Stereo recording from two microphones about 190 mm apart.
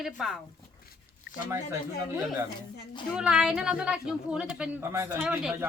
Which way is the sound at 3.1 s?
5° right (ahead or behind).